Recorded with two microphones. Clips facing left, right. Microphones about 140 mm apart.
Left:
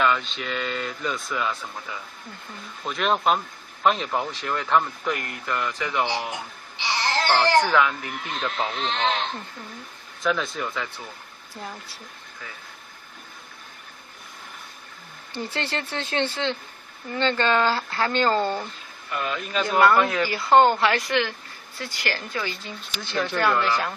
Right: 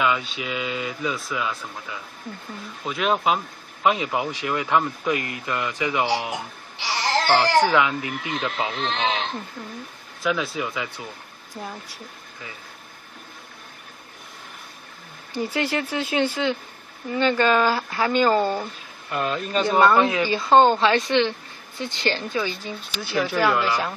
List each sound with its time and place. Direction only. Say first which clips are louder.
0.0 s speech: even; 5° right (ahead or behind)
7.7 s speech: right 1 dB; 15° right (ahead or behind)
10.2 s speech: right 1 dB; 5° right (ahead or behind)
15.3 s speech: right 5 dB; 10° right (ahead or behind)
19.8 s speech: even; 20° right (ahead or behind)